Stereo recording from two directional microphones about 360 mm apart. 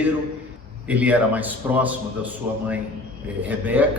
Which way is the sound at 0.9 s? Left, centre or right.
Centre.